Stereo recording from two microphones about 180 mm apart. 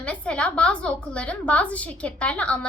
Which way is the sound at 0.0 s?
5° left (ahead or behind).